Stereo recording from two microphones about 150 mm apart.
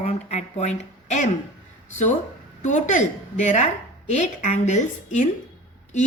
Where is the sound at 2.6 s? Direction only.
55° left (ahead or behind).